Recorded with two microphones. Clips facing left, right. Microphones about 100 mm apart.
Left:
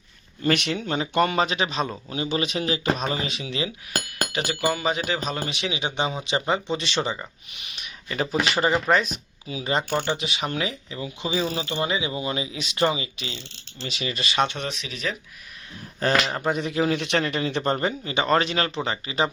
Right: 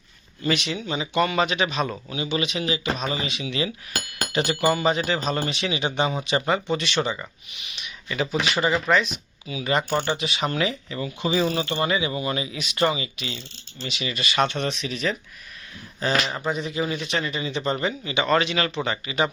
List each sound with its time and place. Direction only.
0.4 s speech: 55° left (ahead or behind); by 3.6 s 40° left (ahead or behind)
4.3 s speech: 5° left (ahead or behind); by 9.8 s 30° left (ahead or behind)
10.0 s speech: 20° left (ahead or behind)
14.4 s speech: 10° left (ahead or behind)
16.2 s speech: 50° left (ahead or behind); by 19.3 s 30° left (ahead or behind)